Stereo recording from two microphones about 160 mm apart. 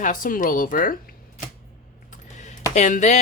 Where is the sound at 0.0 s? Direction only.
55° left (ahead or behind).